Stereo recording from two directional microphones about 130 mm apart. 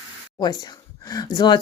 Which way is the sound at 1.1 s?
30° left (ahead or behind).